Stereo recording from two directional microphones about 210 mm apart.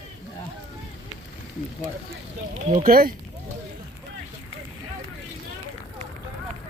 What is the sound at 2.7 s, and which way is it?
Speech, 40° right (ahead or behind).